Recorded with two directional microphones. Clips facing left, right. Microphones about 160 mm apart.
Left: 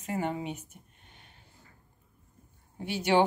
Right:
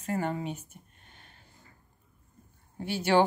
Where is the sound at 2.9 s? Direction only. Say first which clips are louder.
Right 1 dB; 15° left (ahead or behind).